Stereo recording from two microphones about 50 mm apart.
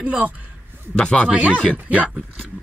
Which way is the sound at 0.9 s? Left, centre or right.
Centre.